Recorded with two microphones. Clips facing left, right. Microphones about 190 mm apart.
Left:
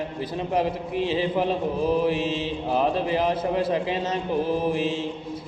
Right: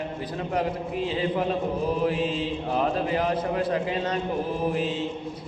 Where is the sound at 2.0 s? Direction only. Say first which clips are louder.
Left 1 dB; 25° left (ahead or behind).